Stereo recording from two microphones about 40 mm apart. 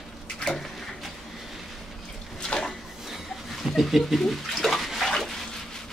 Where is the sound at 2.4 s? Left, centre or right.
Centre.